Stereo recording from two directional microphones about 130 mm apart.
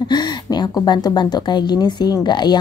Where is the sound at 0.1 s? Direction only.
30° left (ahead or behind).